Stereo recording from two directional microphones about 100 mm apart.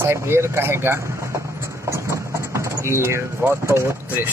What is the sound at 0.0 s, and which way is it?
Speech, 25° right (ahead or behind).